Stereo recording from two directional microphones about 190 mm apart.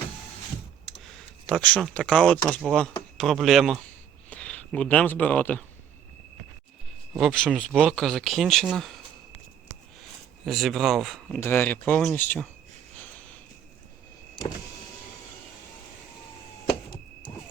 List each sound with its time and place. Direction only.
1.5 s speech: 5° left (ahead or behind)
7.2 s speech: centre (ahead or behind)
10.4 s speech: centre (ahead or behind)
11.3 s speech: 10° left (ahead or behind)